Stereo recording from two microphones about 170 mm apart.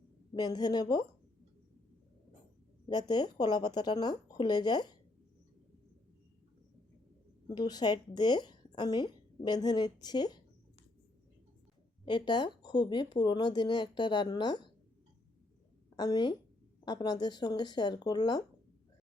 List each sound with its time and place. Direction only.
0.3 s a woman's voice: 25° left (ahead or behind)
2.9 s a woman's voice: 25° left (ahead or behind)
7.4 s a woman's voice: 25° left (ahead or behind)
12.0 s a woman's voice: 25° left (ahead or behind)
16.0 s a woman's voice: 25° left (ahead or behind)